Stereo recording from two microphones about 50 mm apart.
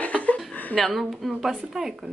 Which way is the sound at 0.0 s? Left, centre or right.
Left.